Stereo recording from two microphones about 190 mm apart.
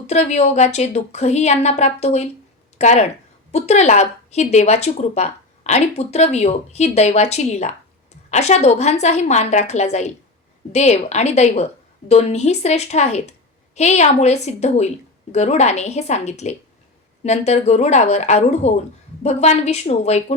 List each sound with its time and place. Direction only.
0.1 s a woman's voice: 35° left (ahead or behind)